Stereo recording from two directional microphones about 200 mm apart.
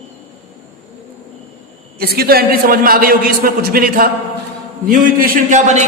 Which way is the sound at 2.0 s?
50° right (ahead or behind).